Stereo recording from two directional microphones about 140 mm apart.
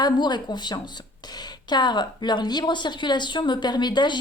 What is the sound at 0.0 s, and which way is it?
Speech, 30° left (ahead or behind).